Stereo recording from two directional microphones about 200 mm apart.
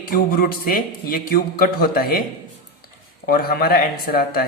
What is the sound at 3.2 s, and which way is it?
Speech, 50° left (ahead or behind).